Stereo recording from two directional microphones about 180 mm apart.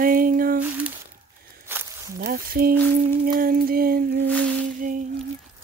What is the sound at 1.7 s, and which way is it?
Walk, 15° right (ahead or behind).